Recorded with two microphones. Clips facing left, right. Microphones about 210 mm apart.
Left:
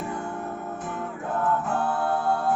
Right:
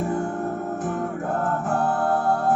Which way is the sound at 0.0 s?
45° right (ahead or behind).